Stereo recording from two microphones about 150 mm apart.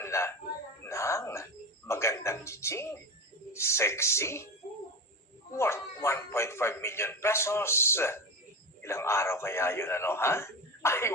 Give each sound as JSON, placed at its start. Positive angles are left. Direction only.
{"t": 0.0, "sound": "speech", "side_deg": 20}
{"t": 0.9, "sound": "a sound", "side_deg": 20}
{"t": 1.9, "sound": "music", "side_deg": 20}
{"t": 3.5, "sound": "a man's voice", "side_deg": 20}
{"t": 5.5, "sound": "a man's voice", "side_deg": 20}